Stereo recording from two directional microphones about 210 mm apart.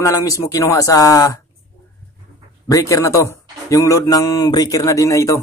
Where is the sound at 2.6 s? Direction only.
15° left (ahead or behind).